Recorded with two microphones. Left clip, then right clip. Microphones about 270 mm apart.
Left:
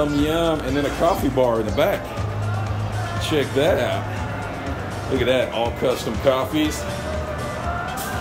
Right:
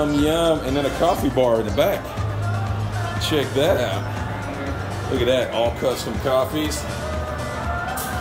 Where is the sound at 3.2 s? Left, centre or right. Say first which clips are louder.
Even; centre.